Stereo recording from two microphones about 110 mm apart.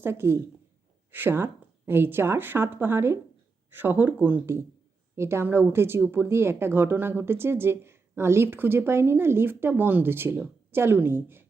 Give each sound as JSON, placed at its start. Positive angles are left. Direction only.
{"t": 0.0, "sound": "speech", "side_deg": -20}